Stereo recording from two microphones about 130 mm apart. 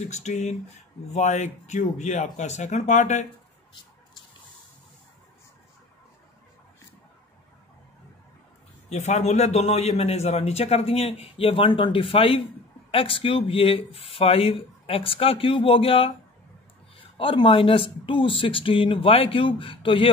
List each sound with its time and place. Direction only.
0.0 s speech: 60° left (ahead or behind)
8.8 s a man's voice: 60° left (ahead or behind); by 20.1 s 45° left (ahead or behind)